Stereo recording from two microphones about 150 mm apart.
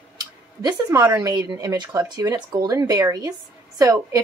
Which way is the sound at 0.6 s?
25° right (ahead or behind).